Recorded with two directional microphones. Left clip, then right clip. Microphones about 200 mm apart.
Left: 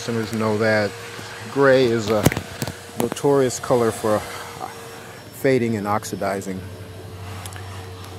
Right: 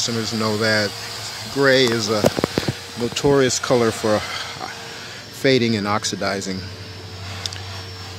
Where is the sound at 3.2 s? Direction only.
10° right (ahead or behind).